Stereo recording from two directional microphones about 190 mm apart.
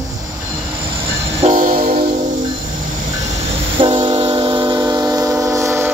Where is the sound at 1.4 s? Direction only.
40° right (ahead or behind).